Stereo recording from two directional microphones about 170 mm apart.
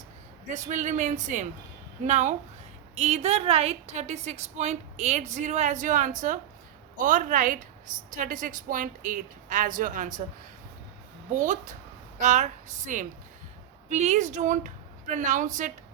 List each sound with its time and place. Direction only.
0.4 s a woman's voice: 45° right (ahead or behind)
11.3 s speech: 45° right (ahead or behind)